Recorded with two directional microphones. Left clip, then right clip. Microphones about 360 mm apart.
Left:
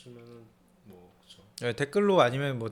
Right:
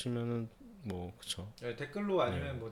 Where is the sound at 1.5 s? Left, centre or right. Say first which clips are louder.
Left 17 dB; left.